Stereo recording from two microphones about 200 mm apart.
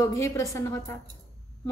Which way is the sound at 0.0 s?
15° left (ahead or behind).